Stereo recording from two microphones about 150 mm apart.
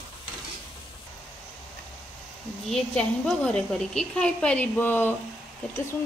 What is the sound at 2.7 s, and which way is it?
A woman's voice, 5° left (ahead or behind).